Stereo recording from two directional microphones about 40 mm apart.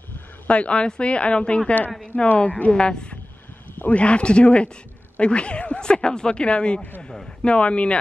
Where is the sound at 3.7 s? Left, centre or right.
Left.